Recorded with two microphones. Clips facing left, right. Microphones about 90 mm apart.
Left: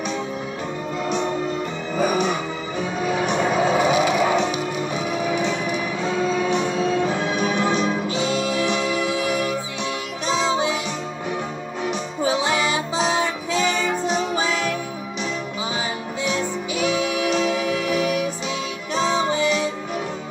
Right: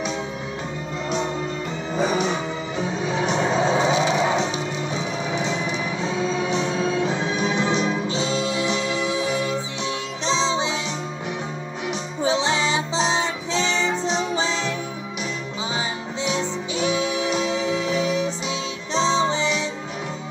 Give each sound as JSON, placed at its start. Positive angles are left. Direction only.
{"t": 2.0, "sound": "music", "side_deg": -25}
{"t": 12.3, "sound": "music", "side_deg": -25}
{"t": 16.3, "sound": "music", "side_deg": -25}